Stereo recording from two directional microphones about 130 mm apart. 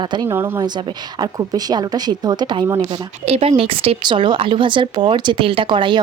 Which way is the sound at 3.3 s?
50° right (ahead or behind).